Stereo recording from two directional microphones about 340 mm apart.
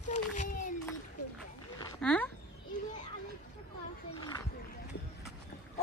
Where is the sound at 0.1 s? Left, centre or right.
Left.